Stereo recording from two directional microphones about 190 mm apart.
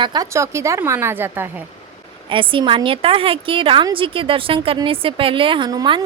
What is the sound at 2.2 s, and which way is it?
A woman's voice, 25° right (ahead or behind).